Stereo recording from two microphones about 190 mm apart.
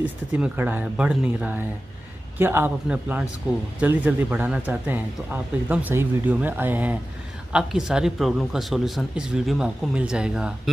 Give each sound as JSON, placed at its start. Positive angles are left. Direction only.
{"t": 0.0, "sound": "speech", "side_deg": -5}